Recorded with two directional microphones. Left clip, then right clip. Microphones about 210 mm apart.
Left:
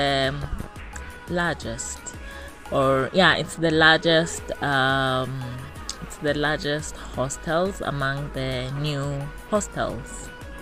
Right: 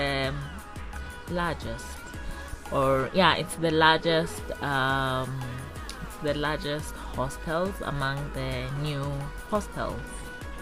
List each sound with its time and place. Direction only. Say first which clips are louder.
0.0 s music: left 6 dB; 15° left (ahead or behind)
1.3 s speech: left 5 dB; 15° left (ahead or behind)